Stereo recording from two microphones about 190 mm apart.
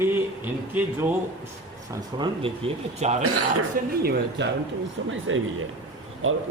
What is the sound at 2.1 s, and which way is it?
Speech, 25° right (ahead or behind).